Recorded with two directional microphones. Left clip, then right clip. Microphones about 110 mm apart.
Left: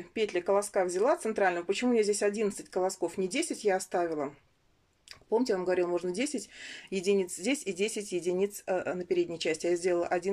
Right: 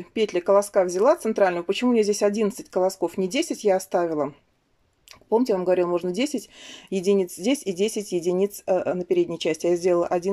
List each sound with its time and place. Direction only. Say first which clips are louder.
0.1 s speech: right 8 dB; 25° right (ahead or behind)
5.3 s speech: right 7 dB; 20° right (ahead or behind)